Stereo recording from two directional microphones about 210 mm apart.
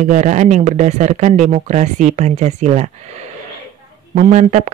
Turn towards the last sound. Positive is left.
turn(degrees=-35)  # may be behind; listen again after turning